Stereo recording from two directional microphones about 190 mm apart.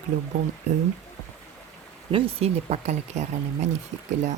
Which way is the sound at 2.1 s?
30° right (ahead or behind).